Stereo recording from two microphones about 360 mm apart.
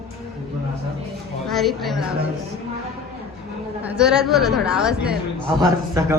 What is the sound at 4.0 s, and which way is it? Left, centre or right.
A man's voice, centre.